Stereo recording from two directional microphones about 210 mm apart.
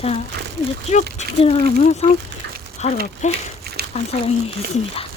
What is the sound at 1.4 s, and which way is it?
Speech, 30° left (ahead or behind).